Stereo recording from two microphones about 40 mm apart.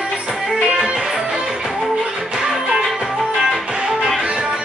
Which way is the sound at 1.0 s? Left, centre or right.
Centre.